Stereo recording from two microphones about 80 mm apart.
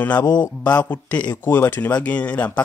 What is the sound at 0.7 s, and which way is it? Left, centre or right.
Speech, left.